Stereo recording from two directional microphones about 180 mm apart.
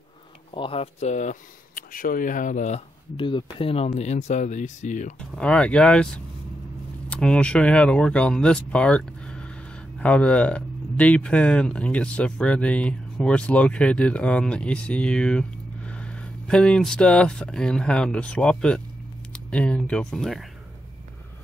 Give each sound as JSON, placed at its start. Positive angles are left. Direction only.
{"t": 0.6, "sound": "speech", "side_deg": 30}
{"t": 3.2, "sound": "speech", "side_deg": 25}
{"t": 5.2, "sound": "speech", "side_deg": 5}